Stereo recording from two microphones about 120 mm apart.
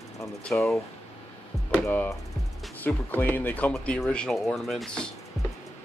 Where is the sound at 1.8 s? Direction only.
15° left (ahead or behind).